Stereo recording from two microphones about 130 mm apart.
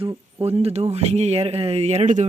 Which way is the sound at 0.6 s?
55° right (ahead or behind).